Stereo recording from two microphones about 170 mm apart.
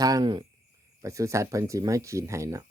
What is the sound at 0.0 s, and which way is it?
Speech, 25° right (ahead or behind).